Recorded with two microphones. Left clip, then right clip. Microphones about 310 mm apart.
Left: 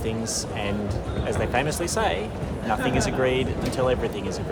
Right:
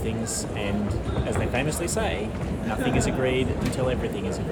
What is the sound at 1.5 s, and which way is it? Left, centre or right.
Speech, centre.